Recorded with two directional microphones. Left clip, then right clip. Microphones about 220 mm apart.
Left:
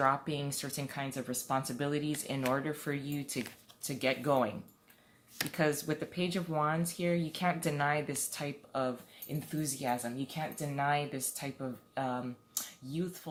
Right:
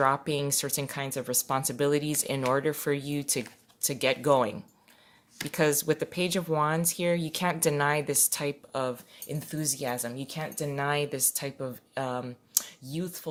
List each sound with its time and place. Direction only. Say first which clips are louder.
0.0 s speech: right 5 dB; 45° right (ahead or behind)